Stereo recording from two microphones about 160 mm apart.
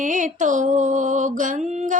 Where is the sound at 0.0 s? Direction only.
55° right (ahead or behind).